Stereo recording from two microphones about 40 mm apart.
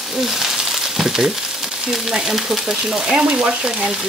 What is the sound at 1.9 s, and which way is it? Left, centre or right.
Frying, centre.